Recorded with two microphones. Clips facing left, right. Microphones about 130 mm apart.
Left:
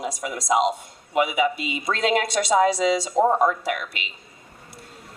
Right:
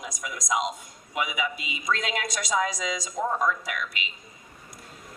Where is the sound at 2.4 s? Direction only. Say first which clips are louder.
Left 10 dB; 40° left (ahead or behind).